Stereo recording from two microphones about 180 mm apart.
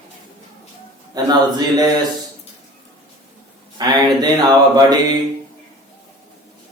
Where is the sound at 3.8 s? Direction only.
20° right (ahead or behind).